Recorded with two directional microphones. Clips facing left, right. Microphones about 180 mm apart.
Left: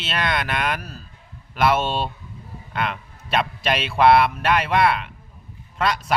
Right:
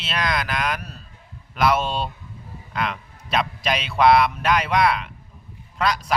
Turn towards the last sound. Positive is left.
turn(degrees=5)  # may be behind; listen again after turning